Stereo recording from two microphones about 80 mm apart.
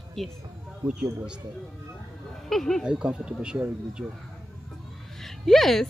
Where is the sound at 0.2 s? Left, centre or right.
Centre.